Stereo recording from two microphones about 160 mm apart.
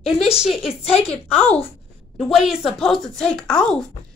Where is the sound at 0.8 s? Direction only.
40° left (ahead or behind).